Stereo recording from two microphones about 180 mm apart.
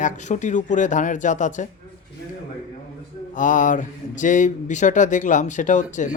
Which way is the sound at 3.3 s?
45° left (ahead or behind).